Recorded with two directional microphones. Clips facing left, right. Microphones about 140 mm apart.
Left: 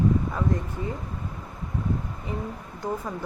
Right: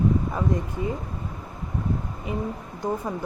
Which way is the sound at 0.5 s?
15° right (ahead or behind).